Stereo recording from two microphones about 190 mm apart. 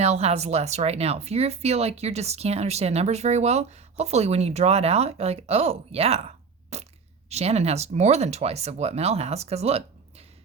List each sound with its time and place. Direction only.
0.0 s speech: 35° right (ahead or behind)